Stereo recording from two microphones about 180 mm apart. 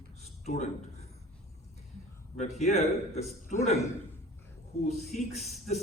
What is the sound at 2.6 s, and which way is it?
A man's voice, 35° left (ahead or behind).